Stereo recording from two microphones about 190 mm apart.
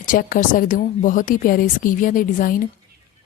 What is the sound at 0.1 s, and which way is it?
Speech, 45° left (ahead or behind).